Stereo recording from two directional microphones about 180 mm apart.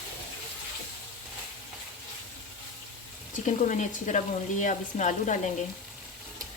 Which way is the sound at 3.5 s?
40° left (ahead or behind).